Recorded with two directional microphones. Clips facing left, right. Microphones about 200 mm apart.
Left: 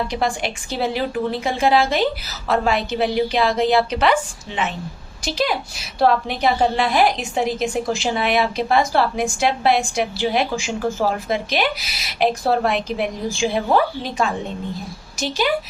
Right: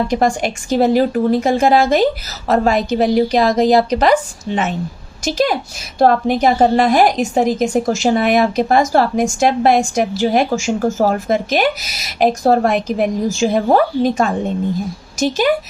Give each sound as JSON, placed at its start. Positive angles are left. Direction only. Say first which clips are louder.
{"t": 0.1, "sound": "a woman's voice", "louder": "right 7 dB", "side_deg": -45}